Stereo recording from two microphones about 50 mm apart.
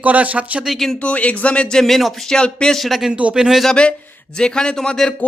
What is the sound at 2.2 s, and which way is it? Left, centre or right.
Speech, centre.